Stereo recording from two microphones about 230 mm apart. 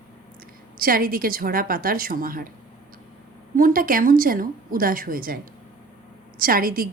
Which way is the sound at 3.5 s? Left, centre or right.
Right.